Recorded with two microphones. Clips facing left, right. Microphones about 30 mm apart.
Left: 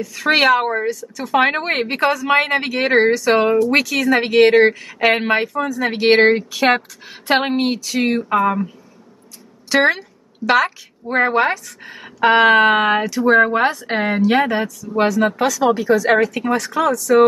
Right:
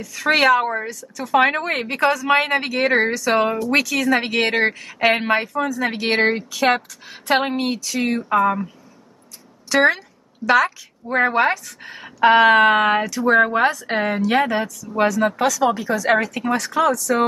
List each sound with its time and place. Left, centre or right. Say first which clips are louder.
0.0 s speech: left 2 dB; centre
9.7 s speech: left 1 dB; centre
9.9 s a sound: left 4 dB; centre
11.2 s speech: even; centre
11.8 s speech: even; centre
12.2 s speech: left 1 dB; centre